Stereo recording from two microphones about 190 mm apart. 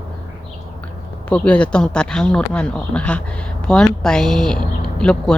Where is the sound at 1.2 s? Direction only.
5° left (ahead or behind).